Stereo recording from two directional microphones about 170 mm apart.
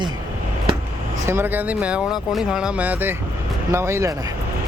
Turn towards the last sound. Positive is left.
turn(degrees=-15)  # may be behind; listen again after turning